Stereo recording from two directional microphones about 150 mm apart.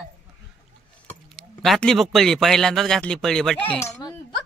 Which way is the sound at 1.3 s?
Centre (ahead or behind).